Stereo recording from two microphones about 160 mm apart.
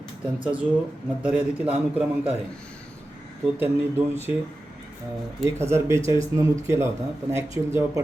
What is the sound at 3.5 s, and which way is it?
Speech, 15° right (ahead or behind).